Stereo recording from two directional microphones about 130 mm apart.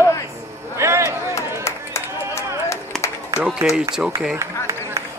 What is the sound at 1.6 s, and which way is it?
Run, 20° left (ahead or behind).